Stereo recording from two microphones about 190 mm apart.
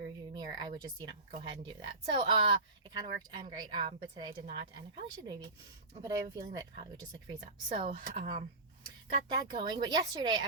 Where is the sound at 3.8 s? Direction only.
25° right (ahead or behind).